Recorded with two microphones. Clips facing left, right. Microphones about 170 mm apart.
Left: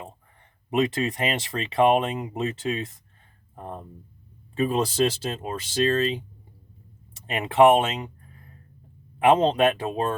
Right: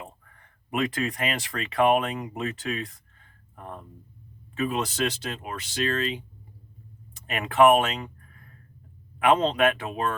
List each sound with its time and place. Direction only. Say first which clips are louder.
0.3 s speech: left 5 dB; 25° left (ahead or behind)
7.3 s speech: left 2 dB; 30° left (ahead or behind)